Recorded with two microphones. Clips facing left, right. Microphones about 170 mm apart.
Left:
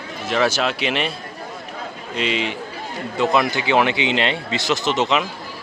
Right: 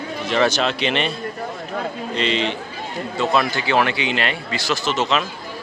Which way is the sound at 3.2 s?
20° left (ahead or behind).